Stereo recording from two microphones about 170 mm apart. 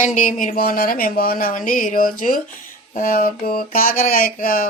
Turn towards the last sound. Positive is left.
turn(degrees=55)  # may be behind; listen again after turning